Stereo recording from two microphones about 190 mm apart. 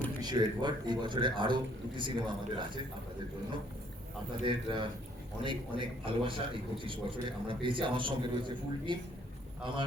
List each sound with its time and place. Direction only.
0.2 s a man's voice: 20° right (ahead or behind)
4.4 s a man's voice: 25° right (ahead or behind)